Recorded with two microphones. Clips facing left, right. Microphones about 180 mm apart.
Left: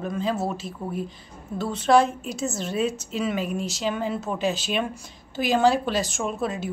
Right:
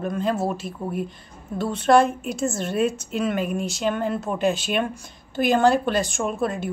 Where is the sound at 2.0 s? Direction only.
55° right (ahead or behind).